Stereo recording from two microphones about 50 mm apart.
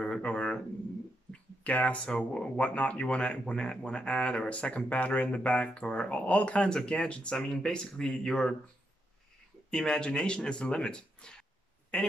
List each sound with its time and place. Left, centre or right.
0.0 s a sound: left
2.1 s speech: centre
9.7 s speech: centre